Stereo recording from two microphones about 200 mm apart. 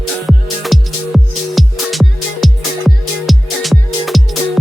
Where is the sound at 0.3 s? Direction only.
Centre (ahead or behind).